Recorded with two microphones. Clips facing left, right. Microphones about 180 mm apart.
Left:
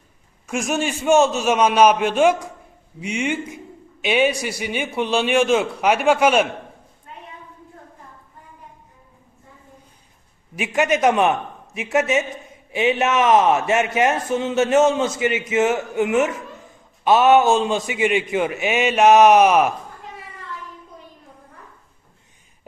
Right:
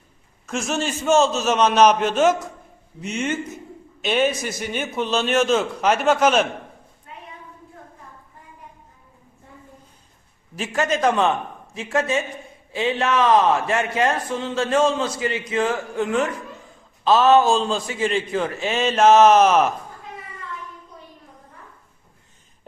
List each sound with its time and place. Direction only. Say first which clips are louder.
0.4 s a man's voice: left 2 dB; 15° left (ahead or behind)
10.5 s a man's voice: left 3 dB; 15° left (ahead or behind)